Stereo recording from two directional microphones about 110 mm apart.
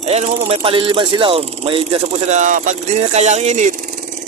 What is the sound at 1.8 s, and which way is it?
Speech, 75° right (ahead or behind).